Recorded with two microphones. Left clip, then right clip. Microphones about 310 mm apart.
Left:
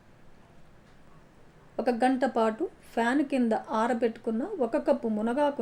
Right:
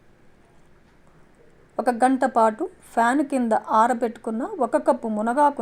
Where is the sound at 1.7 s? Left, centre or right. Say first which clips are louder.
Right 6 dB; centre.